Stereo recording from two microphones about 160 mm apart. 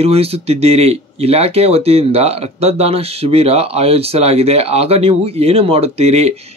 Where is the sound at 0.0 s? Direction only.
40° right (ahead or behind).